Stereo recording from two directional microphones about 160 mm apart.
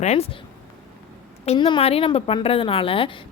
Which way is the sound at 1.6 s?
35° left (ahead or behind).